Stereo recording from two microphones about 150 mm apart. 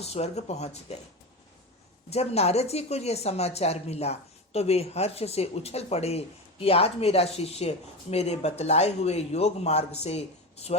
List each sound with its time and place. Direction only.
0.0 s a woman's voice: 45° left (ahead or behind)
2.0 s a woman's voice: 45° left (ahead or behind)